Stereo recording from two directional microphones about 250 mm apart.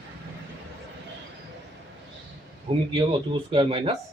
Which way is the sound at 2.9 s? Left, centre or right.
Centre.